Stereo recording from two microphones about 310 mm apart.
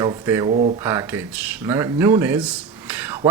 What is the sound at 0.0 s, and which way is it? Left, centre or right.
Speech, centre.